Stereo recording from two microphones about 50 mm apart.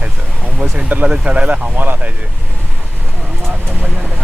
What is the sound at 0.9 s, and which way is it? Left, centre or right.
Speech, right.